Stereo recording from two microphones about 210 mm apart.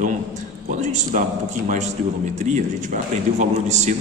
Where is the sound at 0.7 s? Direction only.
35° right (ahead or behind).